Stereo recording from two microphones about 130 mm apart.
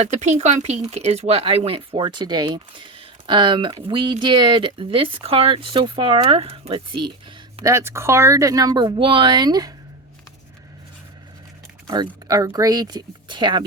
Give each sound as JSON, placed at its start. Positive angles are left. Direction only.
{"t": 0.0, "sound": "speech", "side_deg": -60}
{"t": 7.6, "sound": "speech", "side_deg": -20}
{"t": 11.9, "sound": "speech", "side_deg": -30}